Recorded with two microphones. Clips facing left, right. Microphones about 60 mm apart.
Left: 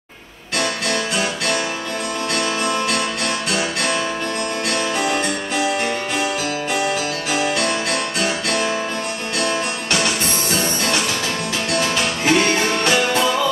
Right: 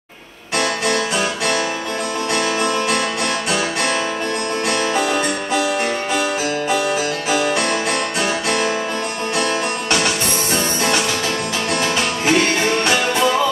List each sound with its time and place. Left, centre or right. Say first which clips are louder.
0.6 s music: right 3 dB; right
4.9 s music: right 1 dB; right
11.7 s music: even; right